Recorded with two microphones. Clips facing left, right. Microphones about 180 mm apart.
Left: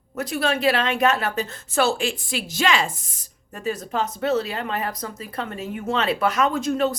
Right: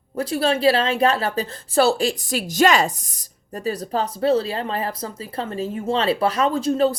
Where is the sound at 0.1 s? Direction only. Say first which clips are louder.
Right 3 dB; 30° right (ahead or behind).